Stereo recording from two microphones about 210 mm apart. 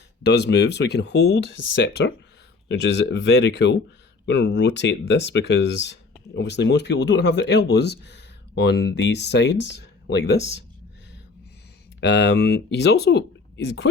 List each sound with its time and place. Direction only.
0.2 s speech: 55° left (ahead or behind)
11.9 s speech: 55° left (ahead or behind)